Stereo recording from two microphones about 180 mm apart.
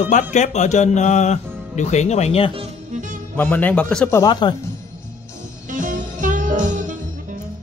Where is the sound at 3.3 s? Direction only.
10° left (ahead or behind).